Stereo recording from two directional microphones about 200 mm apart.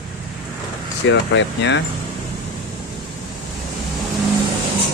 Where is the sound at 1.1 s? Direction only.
65° left (ahead or behind).